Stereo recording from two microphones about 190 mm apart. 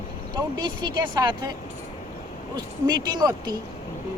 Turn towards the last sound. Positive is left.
turn(degrees=-20)  # may be behind; listen again after turning